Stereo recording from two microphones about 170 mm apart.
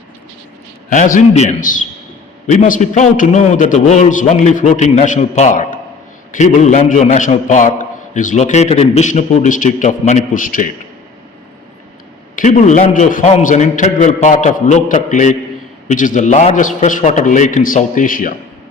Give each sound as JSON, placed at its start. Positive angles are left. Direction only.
{"t": 0.9, "sound": "a man's voice", "side_deg": 50}
{"t": 12.4, "sound": "a man's voice", "side_deg": 45}